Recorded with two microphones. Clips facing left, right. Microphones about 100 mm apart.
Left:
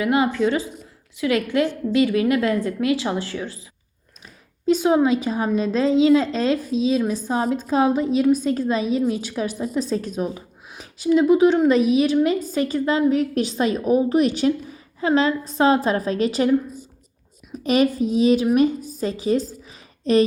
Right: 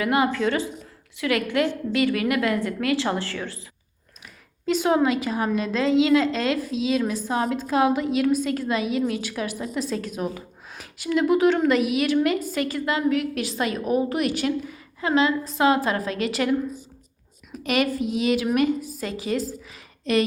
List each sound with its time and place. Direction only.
0.0 s a woman's voice: 25° left (ahead or behind)
4.6 s a woman's voice: 20° left (ahead or behind)
17.6 s a woman's voice: 25° left (ahead or behind)